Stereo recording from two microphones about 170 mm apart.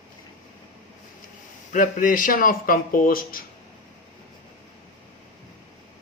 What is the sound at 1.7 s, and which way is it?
Speech, 50° left (ahead or behind).